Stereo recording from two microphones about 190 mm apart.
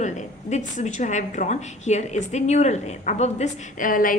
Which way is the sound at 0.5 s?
40° left (ahead or behind).